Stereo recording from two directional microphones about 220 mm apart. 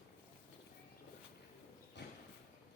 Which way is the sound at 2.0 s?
50° left (ahead or behind).